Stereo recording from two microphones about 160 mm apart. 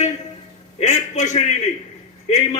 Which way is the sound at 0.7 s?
50° left (ahead or behind).